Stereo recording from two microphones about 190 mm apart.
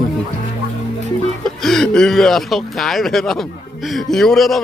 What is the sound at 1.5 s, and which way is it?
Speech, centre (ahead or behind).